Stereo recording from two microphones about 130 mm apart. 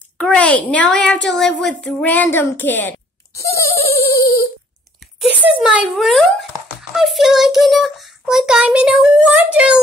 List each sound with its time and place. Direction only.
0.2 s a woman's voice: 10° left (ahead or behind)
4.2 s a sound: 30° left (ahead or behind)
5.6 s a child's voice: 5° right (ahead or behind)